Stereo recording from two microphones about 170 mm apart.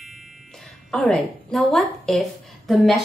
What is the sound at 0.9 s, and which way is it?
A woman's voice, 5° left (ahead or behind).